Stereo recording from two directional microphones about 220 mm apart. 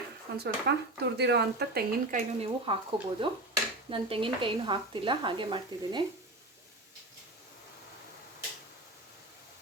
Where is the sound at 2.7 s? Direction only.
25° right (ahead or behind).